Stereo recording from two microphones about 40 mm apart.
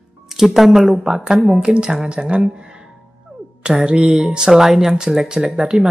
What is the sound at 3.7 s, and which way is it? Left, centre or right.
A woman's voice, right.